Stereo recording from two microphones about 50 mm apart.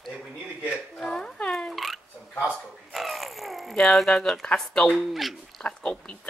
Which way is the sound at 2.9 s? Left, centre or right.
Centre.